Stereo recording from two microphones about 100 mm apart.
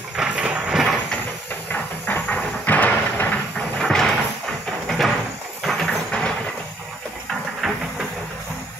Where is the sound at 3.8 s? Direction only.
5° left (ahead or behind).